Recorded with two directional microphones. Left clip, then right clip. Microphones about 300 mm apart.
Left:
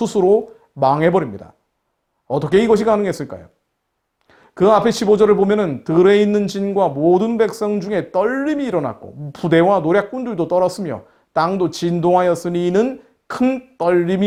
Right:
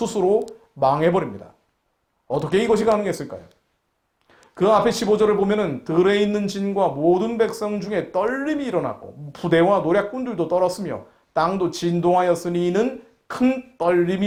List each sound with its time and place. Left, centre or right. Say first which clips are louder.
0.0 s speech: left 5 dB; left